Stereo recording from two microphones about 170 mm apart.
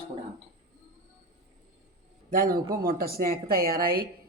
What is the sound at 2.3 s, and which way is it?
Speech, 60° right (ahead or behind).